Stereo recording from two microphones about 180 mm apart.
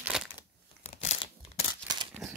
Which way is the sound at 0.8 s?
35° left (ahead or behind).